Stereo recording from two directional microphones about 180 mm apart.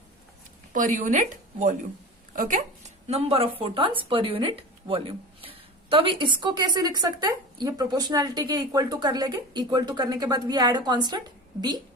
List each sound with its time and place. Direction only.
0.7 s speech: 45° right (ahead or behind); by 11.2 s 25° right (ahead or behind)